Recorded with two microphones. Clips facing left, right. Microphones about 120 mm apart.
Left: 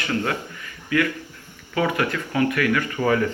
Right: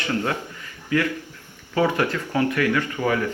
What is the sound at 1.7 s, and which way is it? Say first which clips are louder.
Speech: right 1 dB; 25° right (ahead or behind).